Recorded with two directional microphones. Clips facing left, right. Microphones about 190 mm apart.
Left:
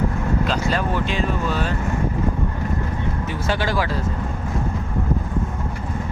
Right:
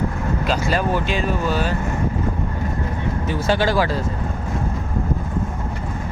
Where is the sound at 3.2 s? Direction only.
30° right (ahead or behind).